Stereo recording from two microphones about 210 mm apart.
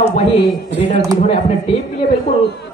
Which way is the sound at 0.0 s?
25° left (ahead or behind).